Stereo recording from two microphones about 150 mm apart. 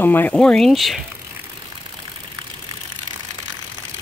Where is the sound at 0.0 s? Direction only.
15° left (ahead or behind).